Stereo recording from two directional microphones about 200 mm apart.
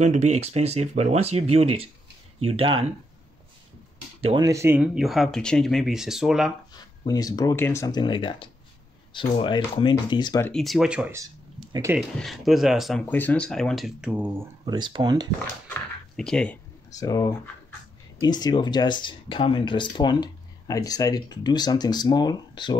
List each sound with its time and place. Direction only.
0.0 s speech: 35° right (ahead or behind)
4.2 s speech: 30° right (ahead or behind)
4.5 s speech: 15° right (ahead or behind)
7.1 s speech: 20° left (ahead or behind)
10.5 s speech: centre (ahead or behind)
12.2 s speech: centre (ahead or behind)
14.6 s speech: 25° right (ahead or behind)
15.7 s a sound: 5° left (ahead or behind)
16.9 s speech: 15° left (ahead or behind)